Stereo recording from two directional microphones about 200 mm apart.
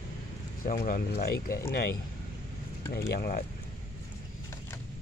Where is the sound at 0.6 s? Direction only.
40° left (ahead or behind).